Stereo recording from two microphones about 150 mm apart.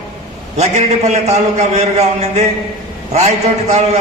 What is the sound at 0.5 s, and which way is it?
A man's voice, 50° right (ahead or behind).